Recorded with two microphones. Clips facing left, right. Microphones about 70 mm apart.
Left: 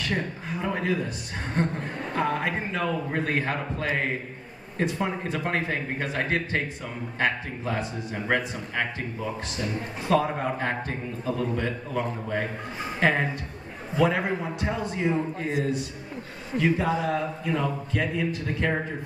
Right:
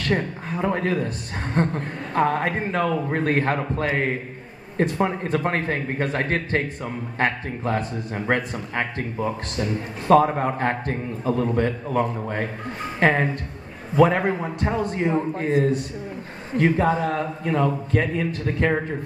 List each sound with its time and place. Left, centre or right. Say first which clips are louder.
0.0 s a man's voice: right 5 dB; right